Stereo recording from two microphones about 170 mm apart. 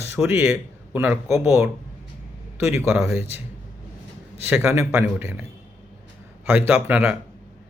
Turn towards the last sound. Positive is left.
turn(degrees=-10)  # may be behind; listen again after turning